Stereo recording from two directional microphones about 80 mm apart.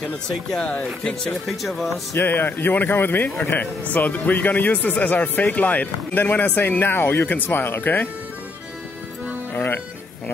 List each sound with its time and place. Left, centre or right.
0.0 s speech: centre
1.5 s speech: centre
2.1 s speech: left
9.5 s music: left